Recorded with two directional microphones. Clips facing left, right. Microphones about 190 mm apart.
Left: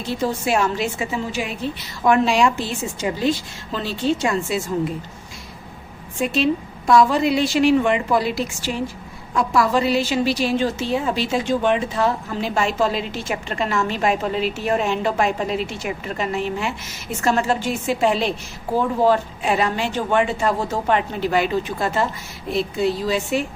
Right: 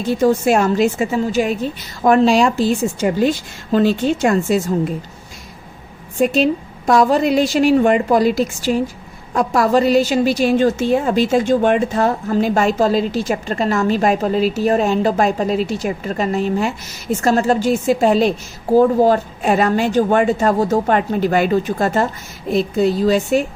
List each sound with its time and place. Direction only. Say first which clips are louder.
0.0 s speech: right 8 dB; 45° right (ahead or behind)
6.1 s a woman's voice: right 5 dB; 45° right (ahead or behind)